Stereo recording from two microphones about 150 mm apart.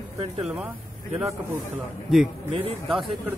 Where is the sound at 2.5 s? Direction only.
35° right (ahead or behind).